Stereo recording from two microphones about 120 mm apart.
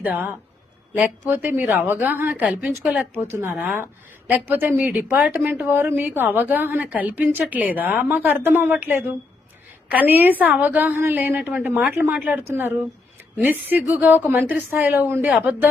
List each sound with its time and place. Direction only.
0.0 s a woman's voice: 10° right (ahead or behind)
1.3 s a woman's voice: 15° right (ahead or behind)
4.3 s a woman's voice: 15° right (ahead or behind)
12.5 s a woman's voice: 20° right (ahead or behind)